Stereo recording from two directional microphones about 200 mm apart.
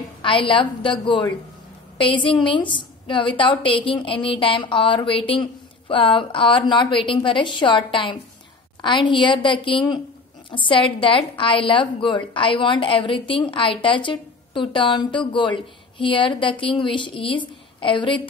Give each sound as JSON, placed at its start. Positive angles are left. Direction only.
{"t": 0.2, "sound": "a woman's voice", "side_deg": 25}